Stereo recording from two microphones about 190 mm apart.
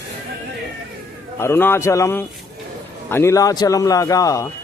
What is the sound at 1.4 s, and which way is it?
A man's voice, 10° left (ahead or behind).